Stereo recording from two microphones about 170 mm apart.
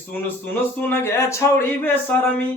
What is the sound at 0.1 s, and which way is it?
Mantra, 10° left (ahead or behind).